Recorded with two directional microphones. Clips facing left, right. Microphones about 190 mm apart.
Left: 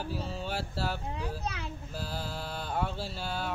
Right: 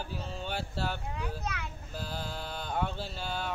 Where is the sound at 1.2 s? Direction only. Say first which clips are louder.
Left 1 dB; 30° left (ahead or behind).